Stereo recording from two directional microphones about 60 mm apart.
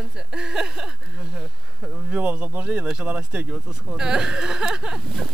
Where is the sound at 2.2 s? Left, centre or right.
Right.